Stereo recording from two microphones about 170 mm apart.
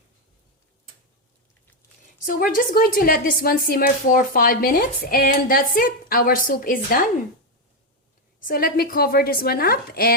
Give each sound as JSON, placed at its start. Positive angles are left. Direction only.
{"t": 2.2, "sound": "a woman's voice", "side_deg": 55}
{"t": 8.4, "sound": "a woman's voice", "side_deg": 55}